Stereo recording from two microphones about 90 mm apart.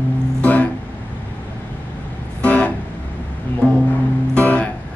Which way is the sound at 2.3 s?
15° left (ahead or behind).